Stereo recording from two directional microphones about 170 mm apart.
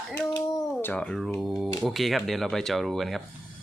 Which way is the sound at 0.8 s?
10° left (ahead or behind).